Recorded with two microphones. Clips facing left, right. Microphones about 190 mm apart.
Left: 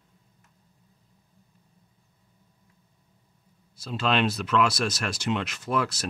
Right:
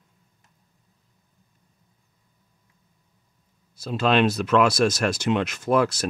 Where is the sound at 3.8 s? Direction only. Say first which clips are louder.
Right 5 dB; 45° right (ahead or behind).